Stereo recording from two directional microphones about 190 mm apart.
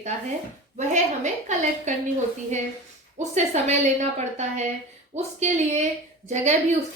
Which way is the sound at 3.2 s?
35° right (ahead or behind).